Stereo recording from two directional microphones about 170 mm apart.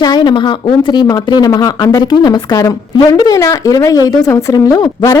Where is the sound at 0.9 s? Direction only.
25° left (ahead or behind).